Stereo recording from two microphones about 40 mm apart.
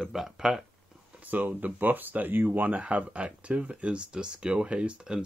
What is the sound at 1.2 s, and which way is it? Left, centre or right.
Speech, right.